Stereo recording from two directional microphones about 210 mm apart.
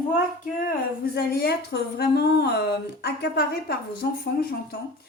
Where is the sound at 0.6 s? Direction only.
45° left (ahead or behind).